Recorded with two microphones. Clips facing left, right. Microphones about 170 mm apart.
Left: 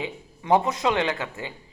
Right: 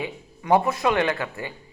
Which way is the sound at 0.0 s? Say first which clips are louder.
Right 1 dB; 20° left (ahead or behind).